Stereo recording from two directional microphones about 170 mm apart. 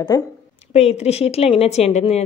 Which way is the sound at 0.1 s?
20° left (ahead or behind).